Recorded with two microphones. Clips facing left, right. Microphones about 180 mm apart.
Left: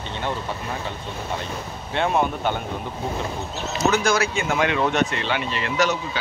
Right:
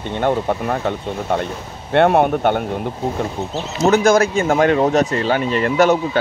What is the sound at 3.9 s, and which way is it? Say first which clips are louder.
Speech: right 11 dB; 50° right (ahead or behind).